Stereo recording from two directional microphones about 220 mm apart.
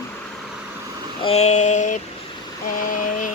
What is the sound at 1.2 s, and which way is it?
Speech, 25° left (ahead or behind).